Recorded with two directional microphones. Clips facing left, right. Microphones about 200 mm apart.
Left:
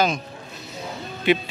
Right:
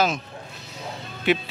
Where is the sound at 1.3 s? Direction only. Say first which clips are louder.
Left 2 dB; centre (ahead or behind).